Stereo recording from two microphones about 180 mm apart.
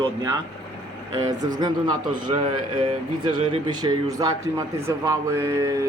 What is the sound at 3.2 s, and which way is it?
Speech, 25° right (ahead or behind).